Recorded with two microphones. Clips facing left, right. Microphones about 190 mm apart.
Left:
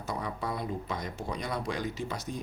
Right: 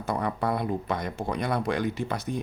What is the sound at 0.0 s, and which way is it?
Speech, 60° right (ahead or behind).